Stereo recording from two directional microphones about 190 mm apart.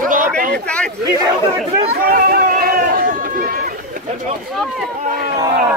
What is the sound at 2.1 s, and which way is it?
Run, 50° right (ahead or behind).